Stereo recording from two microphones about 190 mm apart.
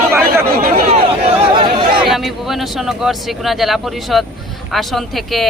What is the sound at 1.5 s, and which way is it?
Chatter, 25° right (ahead or behind).